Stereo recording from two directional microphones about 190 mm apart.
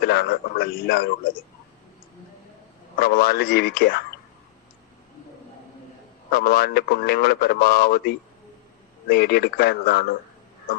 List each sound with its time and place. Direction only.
0.0 s a man's voice: 55° left (ahead or behind)
3.0 s a man's voice: 55° left (ahead or behind)
6.3 s a man's voice: 55° left (ahead or behind)